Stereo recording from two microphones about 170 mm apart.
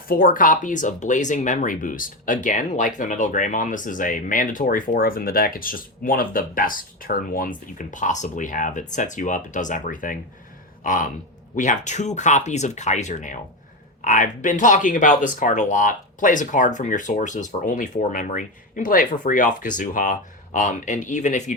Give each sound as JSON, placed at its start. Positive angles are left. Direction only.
{"t": 0.1, "sound": "speech", "side_deg": 55}